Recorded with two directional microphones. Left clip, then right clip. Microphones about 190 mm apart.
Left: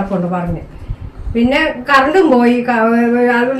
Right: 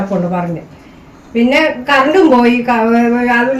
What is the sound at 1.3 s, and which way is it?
Speech, centre (ahead or behind).